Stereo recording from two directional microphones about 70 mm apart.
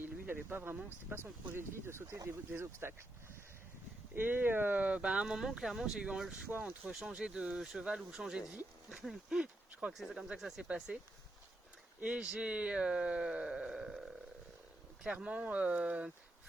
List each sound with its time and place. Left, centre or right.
0.0 s a sound: right
1.1 s speech: right
4.1 s speech: right; by 6.3 s centre
6.5 s speech: right
10.9 s speech: centre
15.0 s speech: centre